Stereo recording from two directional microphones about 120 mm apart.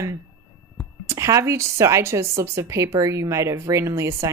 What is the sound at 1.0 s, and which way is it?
A woman's voice, 25° right (ahead or behind).